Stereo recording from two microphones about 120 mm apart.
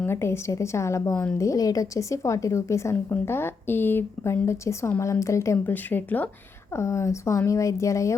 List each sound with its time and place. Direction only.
0.0 s a woman's voice: 20° left (ahead or behind)
6.7 s a woman's voice: 25° left (ahead or behind)